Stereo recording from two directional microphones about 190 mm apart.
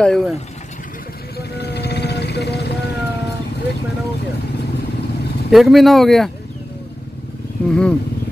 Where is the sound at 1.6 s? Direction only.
60° left (ahead or behind).